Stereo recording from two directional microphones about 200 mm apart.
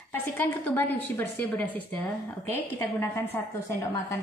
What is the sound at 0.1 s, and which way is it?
A woman's voice, 10° left (ahead or behind).